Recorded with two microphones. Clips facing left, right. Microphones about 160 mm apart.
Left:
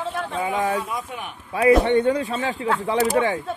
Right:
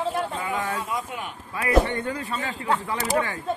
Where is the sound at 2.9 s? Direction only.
90° left.